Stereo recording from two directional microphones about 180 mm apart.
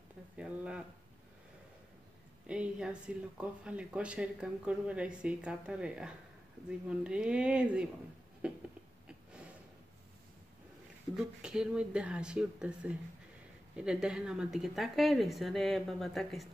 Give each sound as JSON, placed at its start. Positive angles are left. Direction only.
{"t": 0.4, "sound": "speech", "side_deg": -5}
{"t": 2.4, "sound": "speech", "side_deg": -5}
{"t": 9.0, "sound": "a sound", "side_deg": -5}
{"t": 11.4, "sound": "speech", "side_deg": -5}